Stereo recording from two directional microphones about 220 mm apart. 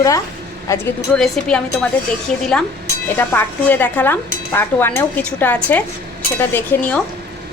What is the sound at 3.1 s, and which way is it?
Speech, 10° left (ahead or behind).